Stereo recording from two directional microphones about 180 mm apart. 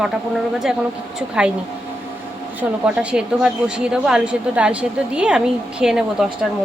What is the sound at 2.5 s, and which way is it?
A woman's voice, 5° right (ahead or behind).